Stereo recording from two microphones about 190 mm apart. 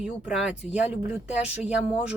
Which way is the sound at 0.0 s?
5° right (ahead or behind).